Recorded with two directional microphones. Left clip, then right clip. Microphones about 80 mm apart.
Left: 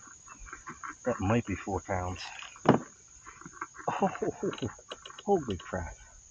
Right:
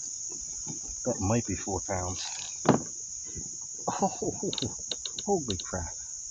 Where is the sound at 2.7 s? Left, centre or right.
Right.